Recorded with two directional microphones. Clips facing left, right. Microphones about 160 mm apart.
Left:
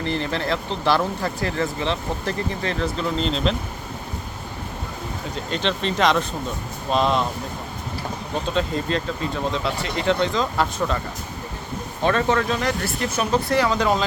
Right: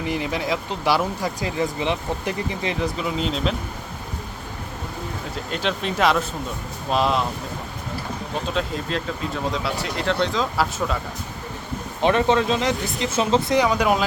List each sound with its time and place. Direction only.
0.0 s speech: 10° right (ahead or behind)
5.5 s speech: 5° right (ahead or behind)
8.4 s speech: centre (ahead or behind)
12.0 s speech: 20° right (ahead or behind)